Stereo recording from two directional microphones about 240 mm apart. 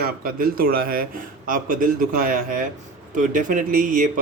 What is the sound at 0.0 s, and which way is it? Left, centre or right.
A man's voice, right.